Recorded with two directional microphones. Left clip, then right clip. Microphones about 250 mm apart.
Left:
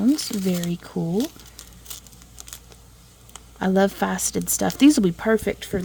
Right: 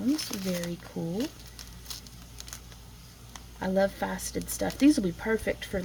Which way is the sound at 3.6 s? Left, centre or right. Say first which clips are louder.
Left 6 dB; left.